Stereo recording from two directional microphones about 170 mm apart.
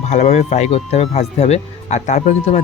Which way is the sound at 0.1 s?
45° left (ahead or behind).